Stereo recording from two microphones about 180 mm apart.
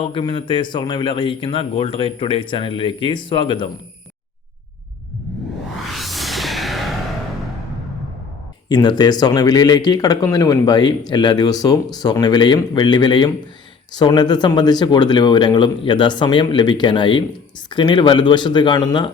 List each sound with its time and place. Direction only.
0.0 s speech: 25° left (ahead or behind)
5.9 s music: centre (ahead or behind)
8.7 s speech: 25° left (ahead or behind)